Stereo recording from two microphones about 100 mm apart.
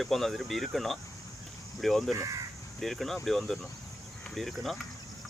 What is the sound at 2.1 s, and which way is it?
Speech, 35° right (ahead or behind).